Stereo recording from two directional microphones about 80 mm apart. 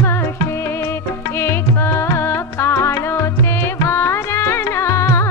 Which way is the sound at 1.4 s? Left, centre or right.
Left.